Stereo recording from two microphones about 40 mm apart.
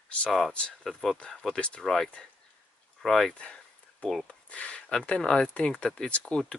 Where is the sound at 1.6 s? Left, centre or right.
Left.